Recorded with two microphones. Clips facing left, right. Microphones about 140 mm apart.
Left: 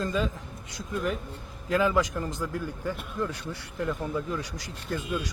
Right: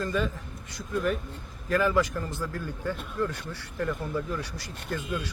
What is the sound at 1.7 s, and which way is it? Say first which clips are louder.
A man's voice: even; 15° left (ahead or behind).